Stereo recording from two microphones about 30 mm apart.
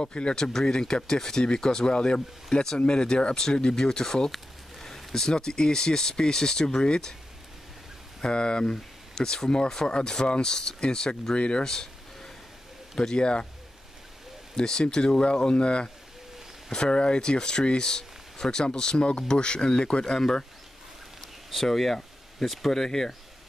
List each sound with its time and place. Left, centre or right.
0.0 s speech: left
0.5 s speech: centre
0.7 s speech: left
1.0 s speech: centre
4.3 s a sound: centre
5.3 s speech: left
8.2 s speech: left
9.1 s speech: centre
11.3 s speech: left
11.6 s a sound: centre
13.1 s speech: left
14.5 s speech: left
20.2 s speech: centre
21.5 s speech: centre